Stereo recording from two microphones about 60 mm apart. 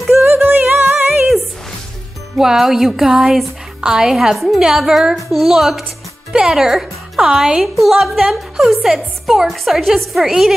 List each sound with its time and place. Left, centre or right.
0.2 s music: right
2.3 s a woman's voice: centre